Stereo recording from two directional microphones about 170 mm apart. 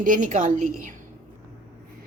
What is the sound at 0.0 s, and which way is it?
Speech, 50° right (ahead or behind).